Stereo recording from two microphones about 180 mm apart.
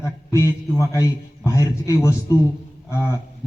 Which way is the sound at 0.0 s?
15° left (ahead or behind).